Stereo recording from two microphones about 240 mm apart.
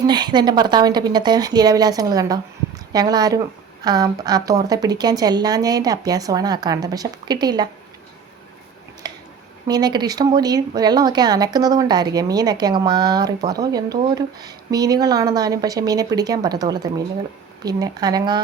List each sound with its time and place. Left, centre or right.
0.0 s speech: centre
9.0 s a sound: centre
9.6 s speech: centre